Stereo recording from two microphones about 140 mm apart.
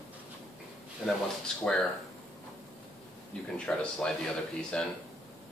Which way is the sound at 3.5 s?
10° left (ahead or behind).